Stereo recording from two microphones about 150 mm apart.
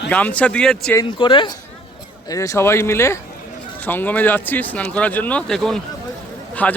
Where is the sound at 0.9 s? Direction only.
30° left (ahead or behind).